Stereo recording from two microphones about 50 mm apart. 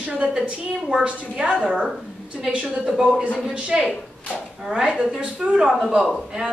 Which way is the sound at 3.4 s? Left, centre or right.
Centre.